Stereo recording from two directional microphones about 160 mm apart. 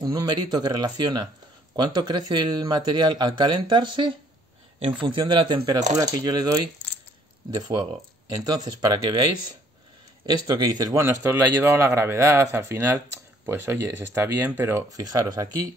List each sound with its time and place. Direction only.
0.0 s a man's voice: 25° right (ahead or behind)